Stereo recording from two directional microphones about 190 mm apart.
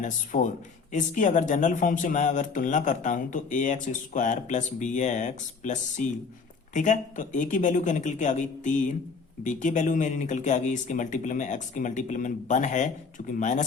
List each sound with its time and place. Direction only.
0.0 s speech: 45° left (ahead or behind)